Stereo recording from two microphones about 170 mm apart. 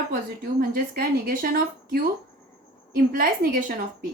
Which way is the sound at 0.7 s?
60° right (ahead or behind).